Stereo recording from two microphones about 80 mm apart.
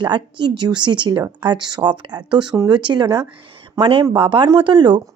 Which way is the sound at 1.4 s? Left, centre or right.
Right.